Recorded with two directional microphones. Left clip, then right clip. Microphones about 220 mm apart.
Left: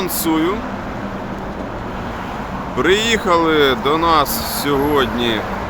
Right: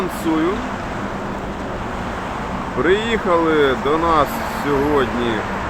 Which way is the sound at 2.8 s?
15° left (ahead or behind).